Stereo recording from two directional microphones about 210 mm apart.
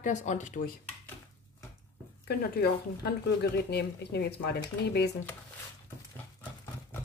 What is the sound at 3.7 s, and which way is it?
Speech, 50° left (ahead or behind).